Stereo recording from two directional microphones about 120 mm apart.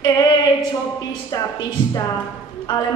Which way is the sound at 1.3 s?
30° left (ahead or behind).